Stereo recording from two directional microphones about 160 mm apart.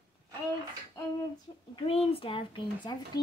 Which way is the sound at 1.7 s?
35° left (ahead or behind).